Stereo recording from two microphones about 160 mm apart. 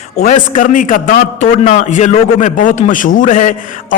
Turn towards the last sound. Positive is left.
turn(degrees=55)  # may be behind; listen again after turning